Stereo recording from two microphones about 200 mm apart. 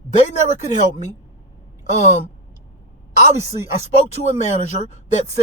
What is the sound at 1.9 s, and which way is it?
Speech, 35° left (ahead or behind).